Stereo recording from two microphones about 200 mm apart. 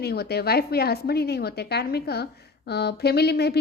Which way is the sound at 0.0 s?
55° left (ahead or behind).